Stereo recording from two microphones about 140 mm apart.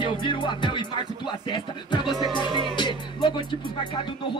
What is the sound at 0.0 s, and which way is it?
Speech, 35° left (ahead or behind).